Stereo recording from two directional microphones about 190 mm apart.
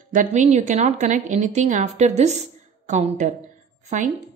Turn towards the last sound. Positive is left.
turn(degrees=-40)  # may be behind; listen again after turning